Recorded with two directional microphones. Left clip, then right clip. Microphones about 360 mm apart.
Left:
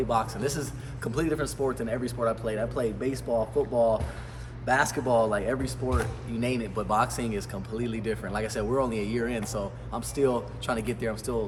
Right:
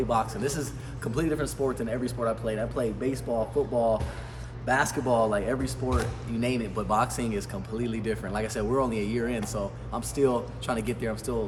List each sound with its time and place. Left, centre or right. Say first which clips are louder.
0.1 s speech: even; centre